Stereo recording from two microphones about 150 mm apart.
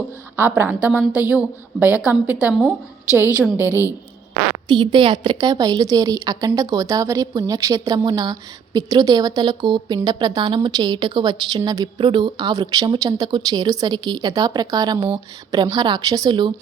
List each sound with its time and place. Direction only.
0.3 s a woman's voice: 15° right (ahead or behind)
4.7 s a woman's voice: 30° right (ahead or behind)
15.0 s a woman's voice: 35° right (ahead or behind)